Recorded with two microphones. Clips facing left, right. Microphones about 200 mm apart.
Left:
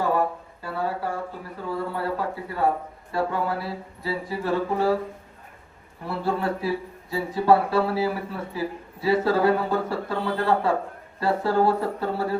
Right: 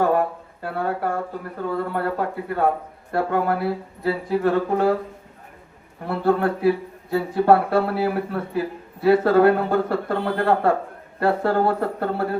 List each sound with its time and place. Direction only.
0.6 s speech: 55° right (ahead or behind)
6.1 s speech: 55° right (ahead or behind)